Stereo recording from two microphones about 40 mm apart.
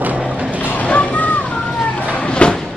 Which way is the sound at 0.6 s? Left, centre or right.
Left.